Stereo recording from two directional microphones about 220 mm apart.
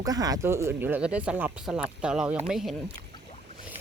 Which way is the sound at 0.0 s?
15° right (ahead or behind).